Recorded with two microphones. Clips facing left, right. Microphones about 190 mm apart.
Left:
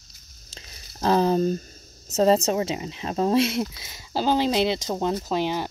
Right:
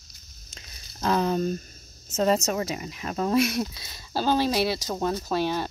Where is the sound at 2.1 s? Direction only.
30° left (ahead or behind).